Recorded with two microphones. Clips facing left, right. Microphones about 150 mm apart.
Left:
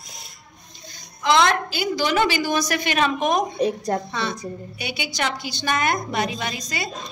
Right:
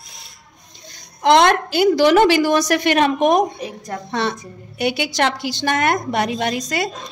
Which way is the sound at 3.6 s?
35° left (ahead or behind).